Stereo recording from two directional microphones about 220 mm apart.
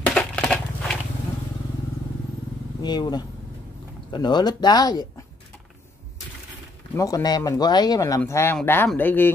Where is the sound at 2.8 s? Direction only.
20° left (ahead or behind).